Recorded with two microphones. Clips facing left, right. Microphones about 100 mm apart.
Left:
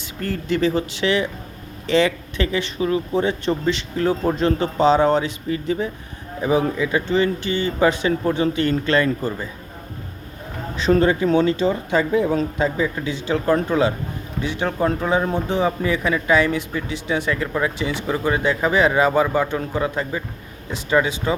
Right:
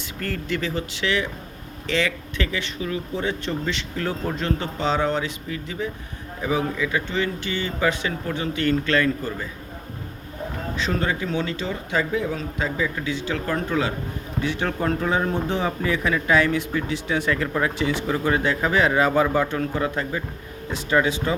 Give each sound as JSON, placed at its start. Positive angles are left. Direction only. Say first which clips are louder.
{"t": 0.2, "sound": "speech", "louder": "left 6 dB", "side_deg": 25}
{"t": 10.8, "sound": "speech", "louder": "left 10 dB", "side_deg": 35}
{"t": 14.4, "sound": "a man's voice", "louder": "left 3 dB", "side_deg": 15}